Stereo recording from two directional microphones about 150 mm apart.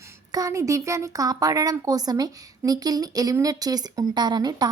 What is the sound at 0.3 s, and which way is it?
A woman's voice, 25° right (ahead or behind).